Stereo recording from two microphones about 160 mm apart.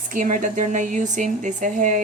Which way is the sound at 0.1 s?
55° right (ahead or behind).